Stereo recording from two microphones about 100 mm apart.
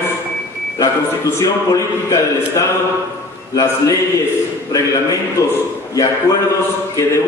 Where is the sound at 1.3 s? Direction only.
35° left (ahead or behind).